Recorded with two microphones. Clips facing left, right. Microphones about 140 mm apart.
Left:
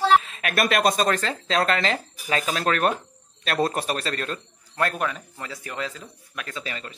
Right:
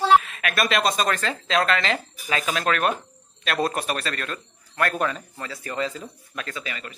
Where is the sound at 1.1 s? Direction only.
35° left (ahead or behind).